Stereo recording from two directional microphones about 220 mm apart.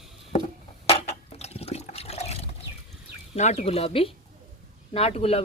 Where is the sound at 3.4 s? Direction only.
30° left (ahead or behind).